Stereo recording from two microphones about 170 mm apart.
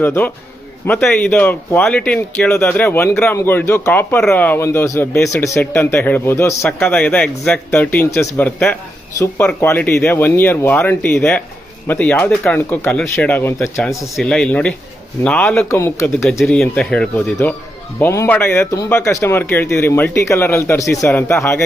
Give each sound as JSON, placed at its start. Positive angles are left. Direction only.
{"t": 0.0, "sound": "speech", "side_deg": 10}
{"t": 16.4, "sound": "speech", "side_deg": 0}